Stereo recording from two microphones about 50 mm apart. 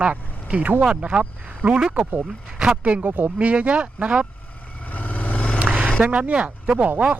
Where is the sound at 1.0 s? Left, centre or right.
Right.